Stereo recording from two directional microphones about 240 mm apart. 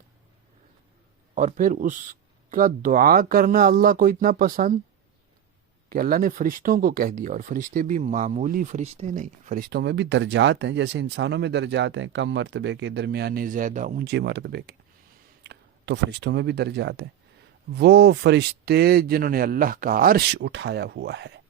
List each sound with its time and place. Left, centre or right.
1.4 s speech: right
5.9 s speech: right